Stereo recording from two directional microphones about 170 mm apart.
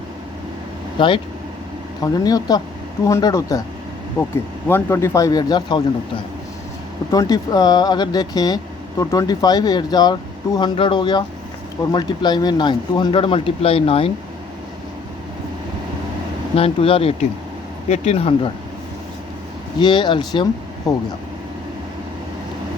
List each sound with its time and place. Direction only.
0.9 s speech: 30° left (ahead or behind)
4.7 s speech: 15° left (ahead or behind); by 14.1 s 35° left (ahead or behind)
16.6 s speech: 35° left (ahead or behind)
19.8 s speech: 25° left (ahead or behind)